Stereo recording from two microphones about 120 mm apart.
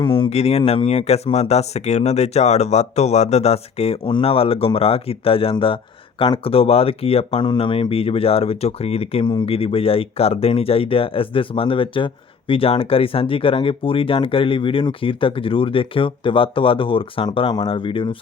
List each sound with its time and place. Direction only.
0.0 s speech: 45° left (ahead or behind)